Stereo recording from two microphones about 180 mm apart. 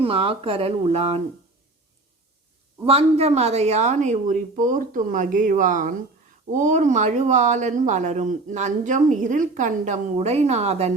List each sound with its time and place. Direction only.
0.0 s speech: 30° right (ahead or behind)
2.8 s speech: 35° right (ahead or behind)